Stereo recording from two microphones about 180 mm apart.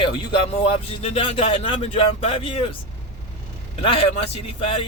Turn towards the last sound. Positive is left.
turn(degrees=30)  # may be behind; listen again after turning